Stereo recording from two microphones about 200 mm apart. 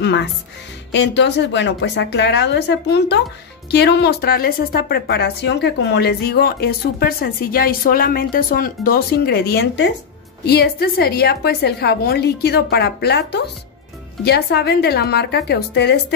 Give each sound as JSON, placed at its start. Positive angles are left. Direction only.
{"t": 0.0, "sound": "a woman's voice", "side_deg": 60}